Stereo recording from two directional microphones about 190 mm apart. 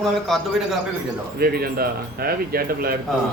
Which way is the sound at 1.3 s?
55° right (ahead or behind).